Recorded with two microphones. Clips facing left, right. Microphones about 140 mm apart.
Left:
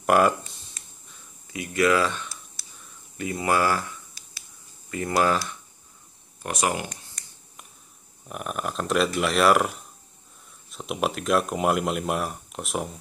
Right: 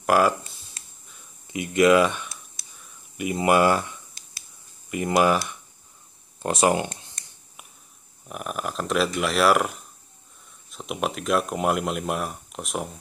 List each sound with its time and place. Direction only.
0.0 s speech: centre (ahead or behind)
1.5 s speech: 20° right (ahead or behind)
4.9 s speech: 20° right (ahead or behind)
6.4 s speech: 30° right (ahead or behind)
8.3 s speech: centre (ahead or behind)